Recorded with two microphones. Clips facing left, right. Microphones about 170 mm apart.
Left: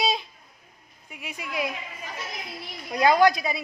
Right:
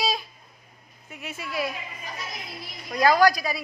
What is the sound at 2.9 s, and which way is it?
Speech, 20° left (ahead or behind).